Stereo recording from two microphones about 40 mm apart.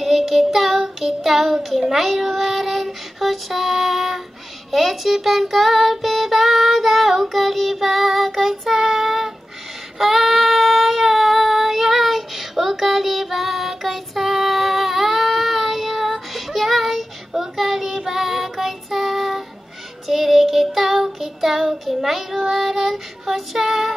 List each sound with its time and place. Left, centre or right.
0.0 s child singing: centre